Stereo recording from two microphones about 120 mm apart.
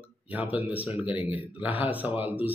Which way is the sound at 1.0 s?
50° left (ahead or behind).